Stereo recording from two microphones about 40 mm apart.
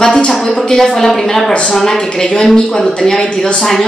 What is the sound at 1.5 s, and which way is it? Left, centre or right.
A woman's voice, left.